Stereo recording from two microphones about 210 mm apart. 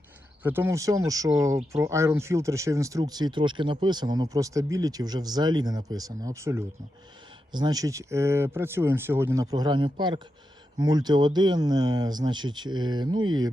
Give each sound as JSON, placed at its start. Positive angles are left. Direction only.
{"t": 0.4, "sound": "speech", "side_deg": -10}